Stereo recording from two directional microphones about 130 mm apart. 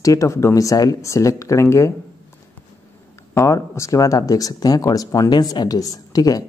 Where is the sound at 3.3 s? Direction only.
25° left (ahead or behind).